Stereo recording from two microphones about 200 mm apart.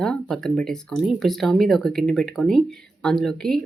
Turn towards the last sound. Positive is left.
turn(degrees=0)  # may be behind; listen again after turning